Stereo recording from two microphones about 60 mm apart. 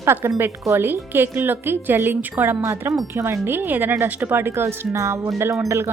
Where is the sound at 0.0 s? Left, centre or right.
Right.